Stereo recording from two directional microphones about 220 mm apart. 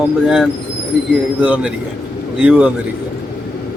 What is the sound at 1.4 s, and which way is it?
Speech, 5° right (ahead or behind).